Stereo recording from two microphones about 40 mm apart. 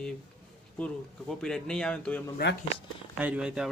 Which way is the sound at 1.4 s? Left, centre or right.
Centre.